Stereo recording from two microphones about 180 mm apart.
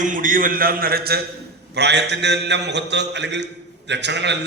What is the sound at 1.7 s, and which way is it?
A man's voice, 70° right (ahead or behind).